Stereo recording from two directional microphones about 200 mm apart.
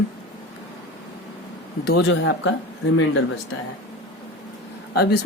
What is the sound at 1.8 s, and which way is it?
Speech, 55° left (ahead or behind).